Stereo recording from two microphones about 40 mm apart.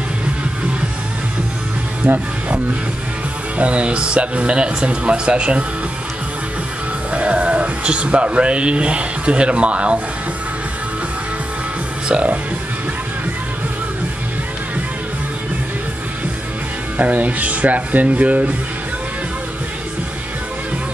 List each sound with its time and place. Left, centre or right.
2.0 s speech: right
7.1 s speech: right
17.0 s speech: right